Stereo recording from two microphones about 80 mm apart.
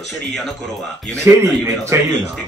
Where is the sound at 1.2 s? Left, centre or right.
Right.